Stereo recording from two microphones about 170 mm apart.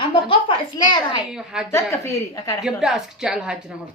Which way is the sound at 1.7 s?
15° left (ahead or behind).